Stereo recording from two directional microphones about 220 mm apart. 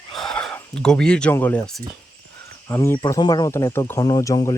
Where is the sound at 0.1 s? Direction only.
Centre (ahead or behind).